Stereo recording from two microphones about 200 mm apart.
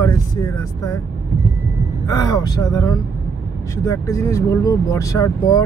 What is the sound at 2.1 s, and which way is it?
Speech, 15° left (ahead or behind).